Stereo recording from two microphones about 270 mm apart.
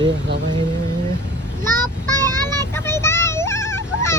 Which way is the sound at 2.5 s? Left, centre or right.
Centre.